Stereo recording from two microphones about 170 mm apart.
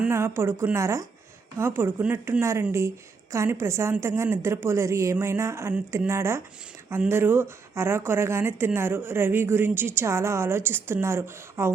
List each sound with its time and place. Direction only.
0.0 s a woman's voice: 15° right (ahead or behind)